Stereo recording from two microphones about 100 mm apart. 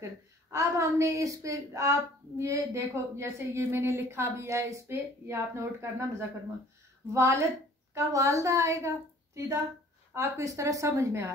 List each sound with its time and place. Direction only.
0.5 s a woman's voice: 30° right (ahead or behind)